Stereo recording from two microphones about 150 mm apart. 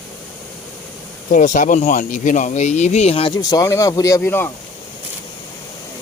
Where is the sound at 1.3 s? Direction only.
60° left (ahead or behind); by 3.3 s 40° left (ahead or behind).